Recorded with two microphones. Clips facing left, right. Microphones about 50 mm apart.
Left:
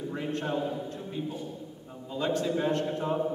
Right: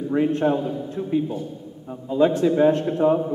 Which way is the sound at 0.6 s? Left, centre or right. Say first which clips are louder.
Right 6 dB; centre.